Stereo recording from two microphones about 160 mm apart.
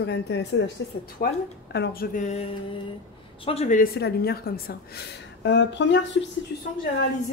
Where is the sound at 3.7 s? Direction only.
70° left (ahead or behind); by 5.9 s 90° left.